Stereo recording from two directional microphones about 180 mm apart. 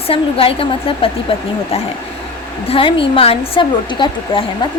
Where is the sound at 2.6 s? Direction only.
30° left (ahead or behind).